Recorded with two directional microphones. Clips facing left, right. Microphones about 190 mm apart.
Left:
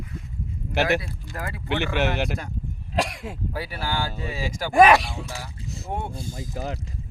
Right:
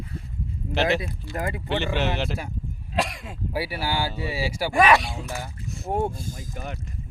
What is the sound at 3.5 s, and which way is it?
Speech, 10° right (ahead or behind).